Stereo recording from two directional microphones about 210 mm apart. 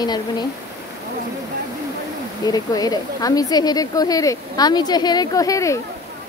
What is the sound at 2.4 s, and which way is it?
A woman's voice, 20° left (ahead or behind).